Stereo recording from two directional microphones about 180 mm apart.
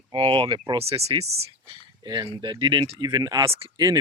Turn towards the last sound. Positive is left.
turn(degrees=-30)  # may be behind; listen again after turning